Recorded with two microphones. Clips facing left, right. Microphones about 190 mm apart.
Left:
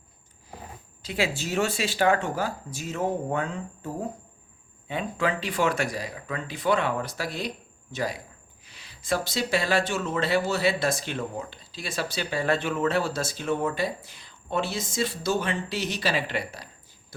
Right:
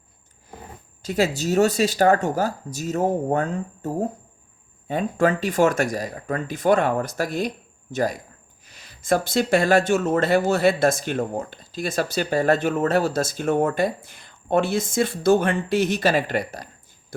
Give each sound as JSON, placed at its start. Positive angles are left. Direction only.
{"t": 1.0, "sound": "speech", "side_deg": -40}